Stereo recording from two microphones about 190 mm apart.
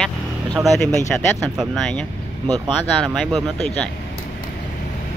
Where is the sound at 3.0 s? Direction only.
Centre (ahead or behind).